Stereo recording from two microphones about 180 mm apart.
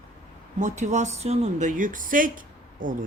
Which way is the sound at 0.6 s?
40° right (ahead or behind).